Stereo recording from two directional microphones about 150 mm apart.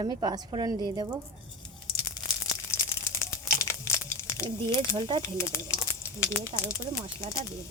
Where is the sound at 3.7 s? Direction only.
20° left (ahead or behind).